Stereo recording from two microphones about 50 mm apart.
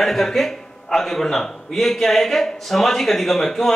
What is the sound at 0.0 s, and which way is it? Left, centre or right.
A man's voice, centre.